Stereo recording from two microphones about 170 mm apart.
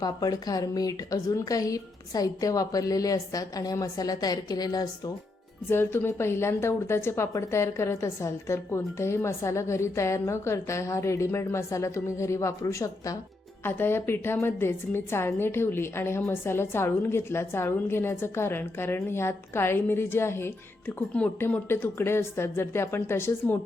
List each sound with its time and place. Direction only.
0.0 s a woman's voice: 20° left (ahead or behind)